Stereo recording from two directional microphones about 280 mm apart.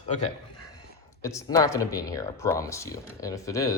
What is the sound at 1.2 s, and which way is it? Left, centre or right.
Speech, centre.